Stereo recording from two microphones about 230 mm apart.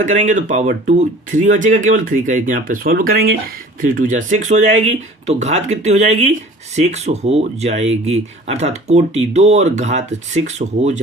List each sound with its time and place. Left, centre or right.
0.0 s speech: right